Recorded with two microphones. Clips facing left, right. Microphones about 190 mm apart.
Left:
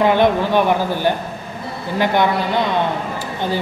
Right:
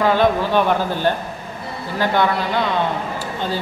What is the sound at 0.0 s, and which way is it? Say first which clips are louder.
Speech: left 2 dB; 20° left (ahead or behind).